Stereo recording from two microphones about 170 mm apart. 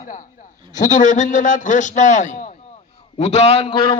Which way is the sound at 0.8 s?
45° left (ahead or behind).